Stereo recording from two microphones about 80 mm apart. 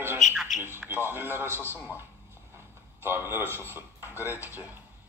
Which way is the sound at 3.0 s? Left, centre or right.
Right.